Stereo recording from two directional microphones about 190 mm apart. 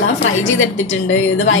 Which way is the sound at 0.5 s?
90° left.